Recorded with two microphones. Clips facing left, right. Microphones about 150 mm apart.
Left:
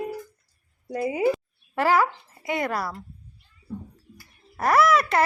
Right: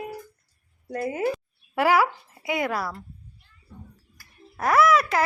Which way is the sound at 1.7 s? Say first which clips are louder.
Right 1 dB; 10° right (ahead or behind).